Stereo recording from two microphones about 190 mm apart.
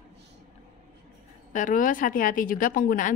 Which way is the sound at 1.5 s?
45° left (ahead or behind).